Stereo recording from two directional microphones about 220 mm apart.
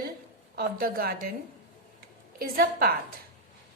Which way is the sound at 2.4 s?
45° right (ahead or behind).